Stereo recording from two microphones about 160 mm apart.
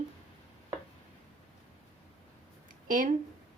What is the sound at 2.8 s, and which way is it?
Speech, 55° right (ahead or behind).